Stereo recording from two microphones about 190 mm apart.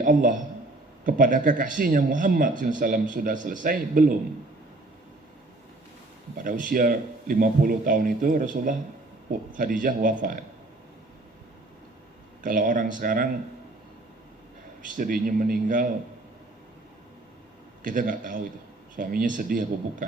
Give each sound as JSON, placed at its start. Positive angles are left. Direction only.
{"t": 0.0, "sound": "speech", "side_deg": -45}
{"t": 6.3, "sound": "speech", "side_deg": -45}
{"t": 12.4, "sound": "speech", "side_deg": -45}
{"t": 14.8, "sound": "speech", "side_deg": -45}
{"t": 17.8, "sound": "speech", "side_deg": -45}